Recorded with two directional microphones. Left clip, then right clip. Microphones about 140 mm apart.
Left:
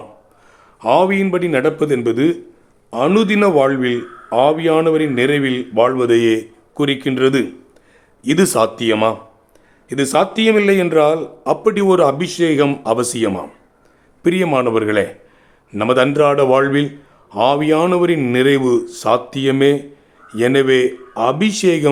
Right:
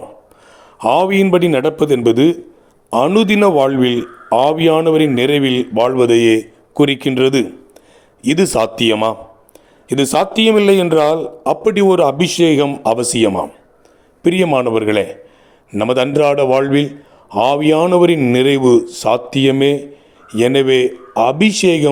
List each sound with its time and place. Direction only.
0.8 s a man's voice: 40° right (ahead or behind); by 21.8 s 20° right (ahead or behind)